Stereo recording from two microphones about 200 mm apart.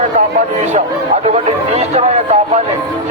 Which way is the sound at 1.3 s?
35° right (ahead or behind).